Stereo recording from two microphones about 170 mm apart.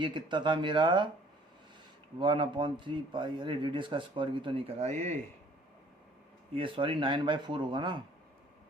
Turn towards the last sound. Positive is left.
turn(degrees=-25)  # may be behind; listen again after turning